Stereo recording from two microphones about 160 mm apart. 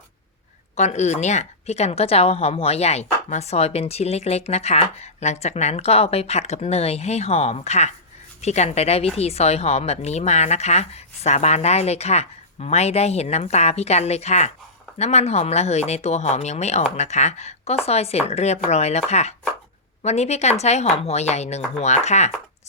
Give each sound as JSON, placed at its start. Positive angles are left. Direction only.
{"t": 0.8, "sound": "a woman's voice", "side_deg": 45}